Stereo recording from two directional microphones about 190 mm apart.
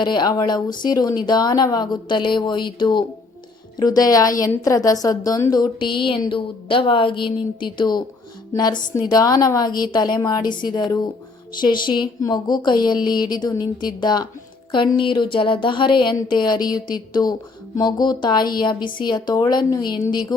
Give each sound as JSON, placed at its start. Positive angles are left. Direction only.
{"t": 0.0, "sound": "speech", "side_deg": 20}